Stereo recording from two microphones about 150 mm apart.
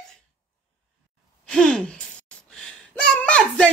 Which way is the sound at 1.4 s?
5° left (ahead or behind).